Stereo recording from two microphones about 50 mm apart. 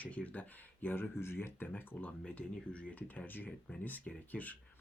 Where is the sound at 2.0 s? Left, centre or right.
Left.